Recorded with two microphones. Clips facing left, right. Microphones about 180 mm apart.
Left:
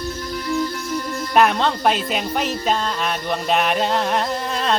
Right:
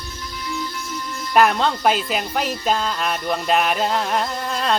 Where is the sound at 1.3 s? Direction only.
Centre (ahead or behind).